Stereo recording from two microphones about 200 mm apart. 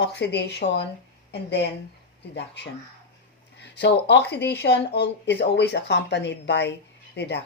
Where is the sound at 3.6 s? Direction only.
60° left (ahead or behind).